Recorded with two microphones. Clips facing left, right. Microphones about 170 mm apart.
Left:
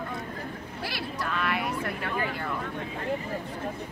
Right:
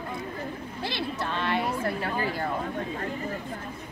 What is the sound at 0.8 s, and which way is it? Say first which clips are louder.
Speech: right 3 dB; 25° right (ahead or behind).